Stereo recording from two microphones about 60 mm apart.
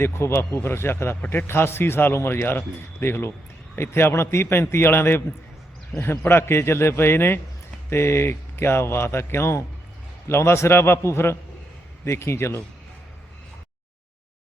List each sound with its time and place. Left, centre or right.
0.0 s speech: left